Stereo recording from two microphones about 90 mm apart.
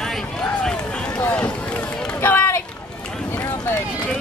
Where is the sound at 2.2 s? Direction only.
25° left (ahead or behind).